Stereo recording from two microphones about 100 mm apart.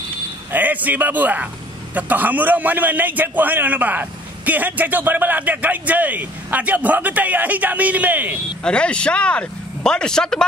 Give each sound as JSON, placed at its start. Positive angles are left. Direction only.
{"t": 0.5, "sound": "a man's voice", "side_deg": -15}
{"t": 8.6, "sound": "speech", "side_deg": 10}